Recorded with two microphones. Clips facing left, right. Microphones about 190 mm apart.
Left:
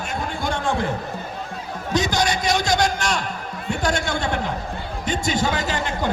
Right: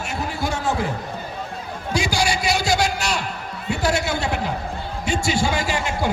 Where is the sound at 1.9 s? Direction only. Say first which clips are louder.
Left 1 dB; 10° right (ahead or behind).